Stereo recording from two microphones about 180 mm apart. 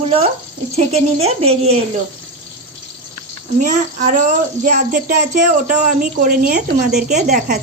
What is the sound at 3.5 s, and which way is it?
Speech, 45° right (ahead or behind).